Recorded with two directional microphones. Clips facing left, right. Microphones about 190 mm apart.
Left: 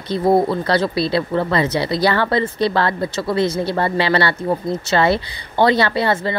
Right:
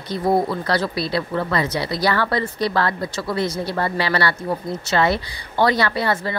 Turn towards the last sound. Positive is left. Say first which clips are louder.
# left 3 dB
turn(degrees=25)  # may be behind; listen again after turning